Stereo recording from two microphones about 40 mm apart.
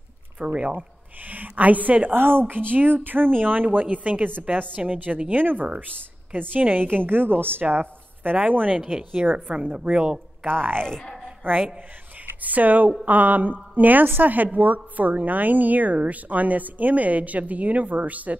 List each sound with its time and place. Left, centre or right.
0.4 s a woman's voice: right
2.1 s a woman's voice: right
7.7 s a woman's voice: right
9.8 s speech: right
10.4 s a woman's voice: right
10.9 s speech: centre
11.4 s a woman's voice: right